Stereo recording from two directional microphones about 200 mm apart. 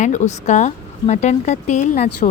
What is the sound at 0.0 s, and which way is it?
Speech, 35° left (ahead or behind).